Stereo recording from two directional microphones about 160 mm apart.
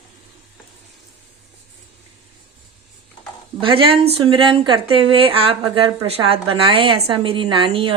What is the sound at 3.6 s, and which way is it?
Speech, 30° right (ahead or behind).